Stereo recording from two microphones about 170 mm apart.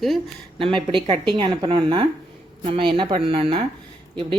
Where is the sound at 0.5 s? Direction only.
30° right (ahead or behind).